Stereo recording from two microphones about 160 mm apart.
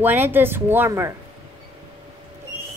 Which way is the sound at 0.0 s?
10° right (ahead or behind).